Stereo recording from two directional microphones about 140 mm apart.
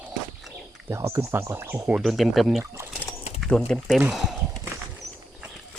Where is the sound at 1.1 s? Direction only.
15° right (ahead or behind).